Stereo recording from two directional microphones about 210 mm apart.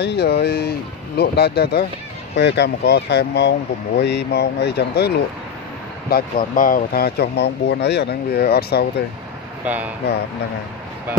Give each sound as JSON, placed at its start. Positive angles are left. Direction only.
{"t": 0.0, "sound": "speech", "side_deg": 50}